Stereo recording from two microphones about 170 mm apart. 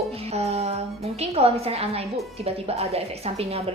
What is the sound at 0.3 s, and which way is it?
A woman's voice, 40° right (ahead or behind).